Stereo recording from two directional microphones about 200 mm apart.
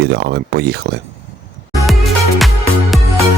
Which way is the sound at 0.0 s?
55° right (ahead or behind).